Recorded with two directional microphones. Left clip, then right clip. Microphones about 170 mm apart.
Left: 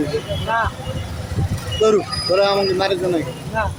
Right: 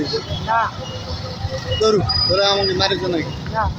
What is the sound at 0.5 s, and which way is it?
Speech, 65° left (ahead or behind).